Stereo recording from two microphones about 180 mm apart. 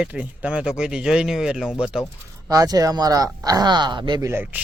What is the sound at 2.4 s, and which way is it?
Speech, 20° right (ahead or behind).